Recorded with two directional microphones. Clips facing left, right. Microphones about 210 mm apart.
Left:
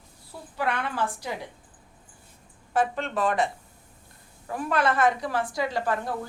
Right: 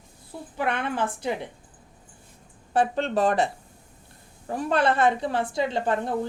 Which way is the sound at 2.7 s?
30° right (ahead or behind).